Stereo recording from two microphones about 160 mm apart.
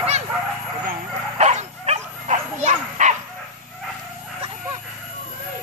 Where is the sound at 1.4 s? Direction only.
45° right (ahead or behind).